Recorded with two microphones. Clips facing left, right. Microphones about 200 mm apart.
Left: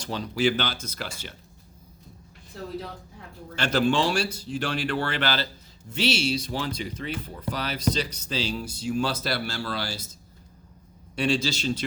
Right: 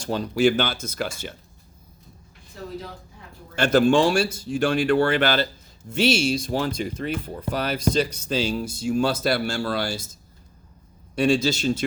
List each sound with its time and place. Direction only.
0.1 s speech: 50° right (ahead or behind)
3.5 s speech: 50° right (ahead or behind)
11.1 s speech: 50° right (ahead or behind)